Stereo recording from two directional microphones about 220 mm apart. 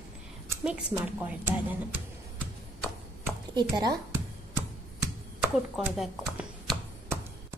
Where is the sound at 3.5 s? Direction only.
20° right (ahead or behind).